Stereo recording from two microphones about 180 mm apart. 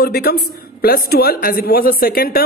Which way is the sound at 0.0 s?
60° left (ahead or behind).